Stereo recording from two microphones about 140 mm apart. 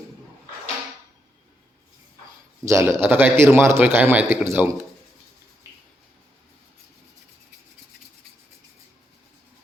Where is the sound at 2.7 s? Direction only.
15° right (ahead or behind).